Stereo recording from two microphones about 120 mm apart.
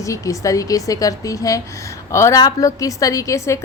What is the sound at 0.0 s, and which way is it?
A woman's voice, 25° left (ahead or behind).